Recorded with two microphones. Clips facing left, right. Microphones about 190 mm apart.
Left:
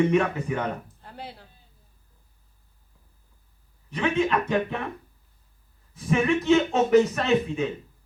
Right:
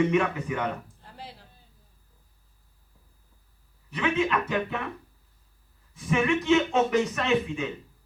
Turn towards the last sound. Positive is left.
turn(degrees=35)  # may be behind; listen again after turning